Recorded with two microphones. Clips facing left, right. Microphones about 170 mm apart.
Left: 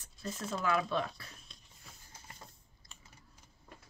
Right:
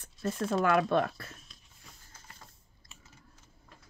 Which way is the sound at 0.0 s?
55° right (ahead or behind).